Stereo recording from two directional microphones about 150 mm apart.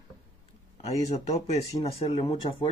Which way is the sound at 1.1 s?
45° left (ahead or behind).